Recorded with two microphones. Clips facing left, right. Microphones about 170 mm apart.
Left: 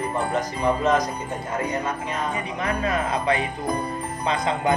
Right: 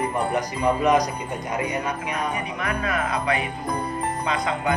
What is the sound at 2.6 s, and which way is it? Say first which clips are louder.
Speech: left 3 dB; 30° left (ahead or behind).